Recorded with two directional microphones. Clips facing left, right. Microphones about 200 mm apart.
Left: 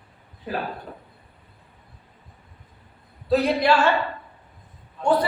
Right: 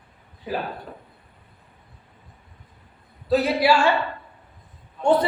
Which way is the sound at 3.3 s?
5° right (ahead or behind).